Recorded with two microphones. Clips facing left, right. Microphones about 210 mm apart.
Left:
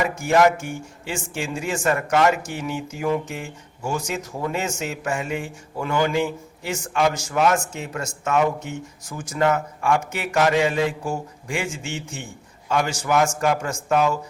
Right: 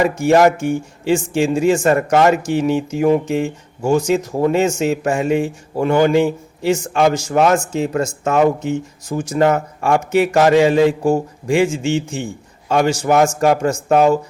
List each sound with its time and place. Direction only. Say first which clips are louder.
0.3 s a man's voice: right 5 dB; 35° right (ahead or behind)